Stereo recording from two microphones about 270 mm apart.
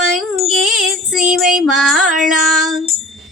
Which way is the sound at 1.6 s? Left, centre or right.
Centre.